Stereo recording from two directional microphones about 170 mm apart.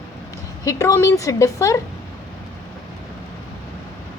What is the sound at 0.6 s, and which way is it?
A woman's voice, 20° left (ahead or behind).